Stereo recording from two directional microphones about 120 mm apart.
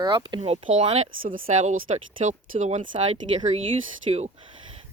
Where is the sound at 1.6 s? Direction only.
80° right.